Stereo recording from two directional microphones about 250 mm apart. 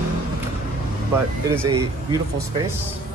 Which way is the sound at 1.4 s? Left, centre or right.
Centre.